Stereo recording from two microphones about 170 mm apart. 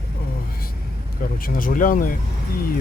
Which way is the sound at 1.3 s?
55° left (ahead or behind).